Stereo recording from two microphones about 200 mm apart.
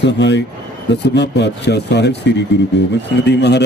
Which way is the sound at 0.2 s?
60° left (ahead or behind).